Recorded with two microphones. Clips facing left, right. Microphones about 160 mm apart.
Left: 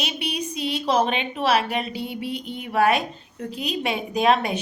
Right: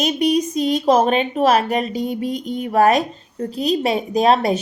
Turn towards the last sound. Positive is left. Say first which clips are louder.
# right 5 dB
turn(degrees=-35)  # may be behind; listen again after turning